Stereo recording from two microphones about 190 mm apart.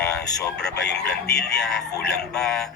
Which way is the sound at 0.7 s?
60° left (ahead or behind).